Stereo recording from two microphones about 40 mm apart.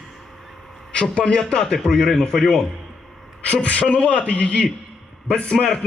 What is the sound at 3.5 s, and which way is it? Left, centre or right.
A man's voice, left.